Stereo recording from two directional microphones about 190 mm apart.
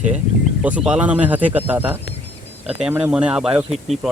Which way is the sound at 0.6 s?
5° right (ahead or behind).